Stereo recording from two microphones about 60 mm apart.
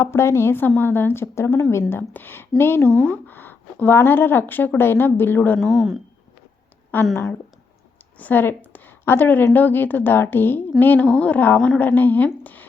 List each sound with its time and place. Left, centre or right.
0.0 s a woman's voice: left
1.9 s speech: left
3.0 s speech: left
5.5 s speech: centre
6.9 s speech: left
8.2 s speech: left